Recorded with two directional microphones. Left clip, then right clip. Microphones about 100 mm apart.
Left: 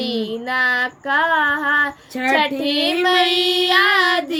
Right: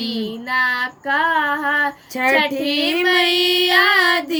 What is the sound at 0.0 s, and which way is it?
Female singing, 20° left (ahead or behind).